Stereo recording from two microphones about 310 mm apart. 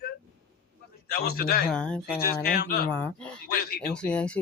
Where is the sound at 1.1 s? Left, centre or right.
Left.